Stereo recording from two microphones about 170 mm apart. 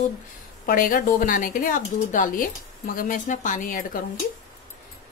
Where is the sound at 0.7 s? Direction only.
55° left (ahead or behind).